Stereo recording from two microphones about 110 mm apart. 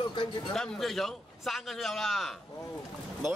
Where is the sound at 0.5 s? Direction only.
5° left (ahead or behind).